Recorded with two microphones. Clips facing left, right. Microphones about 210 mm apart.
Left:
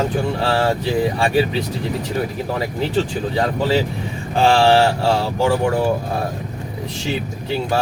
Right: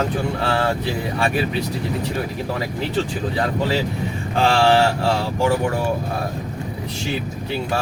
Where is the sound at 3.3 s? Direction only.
30° left (ahead or behind).